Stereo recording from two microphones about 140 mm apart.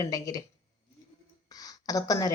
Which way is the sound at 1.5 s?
25° left (ahead or behind).